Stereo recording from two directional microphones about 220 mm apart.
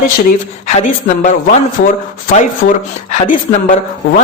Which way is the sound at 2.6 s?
30° left (ahead or behind).